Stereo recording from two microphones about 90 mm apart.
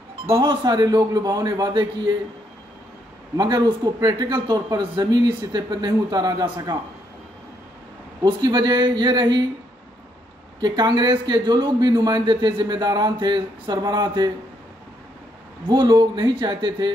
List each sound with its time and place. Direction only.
0.4 s a man's voice: 50° right (ahead or behind)
3.3 s a man's voice: 55° right (ahead or behind)
8.2 s a man's voice: 50° right (ahead or behind)
10.6 s a man's voice: 55° right (ahead or behind)
15.7 s a man's voice: 55° right (ahead or behind)